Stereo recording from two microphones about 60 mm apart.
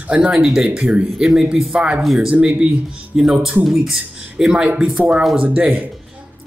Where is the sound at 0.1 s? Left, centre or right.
Centre.